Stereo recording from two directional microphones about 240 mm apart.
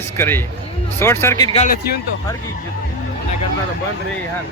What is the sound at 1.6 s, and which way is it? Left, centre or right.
Speech, left.